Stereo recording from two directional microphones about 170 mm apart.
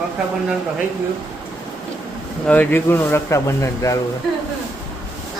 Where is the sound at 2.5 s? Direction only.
10° left (ahead or behind).